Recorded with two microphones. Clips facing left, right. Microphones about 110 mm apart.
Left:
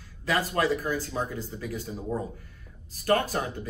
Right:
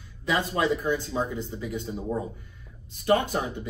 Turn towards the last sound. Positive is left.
turn(degrees=-20)  # may be behind; listen again after turning